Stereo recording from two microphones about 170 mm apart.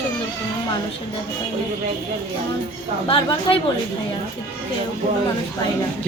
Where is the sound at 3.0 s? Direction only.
30° left (ahead or behind).